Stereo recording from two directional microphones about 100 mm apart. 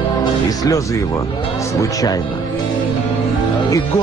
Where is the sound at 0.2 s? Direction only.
35° left (ahead or behind).